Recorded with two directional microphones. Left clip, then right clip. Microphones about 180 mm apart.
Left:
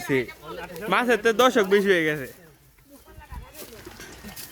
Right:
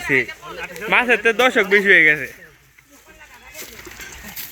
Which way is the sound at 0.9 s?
5° left (ahead or behind).